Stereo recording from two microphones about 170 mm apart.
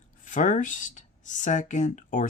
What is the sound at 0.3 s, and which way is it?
Speech, 50° left (ahead or behind).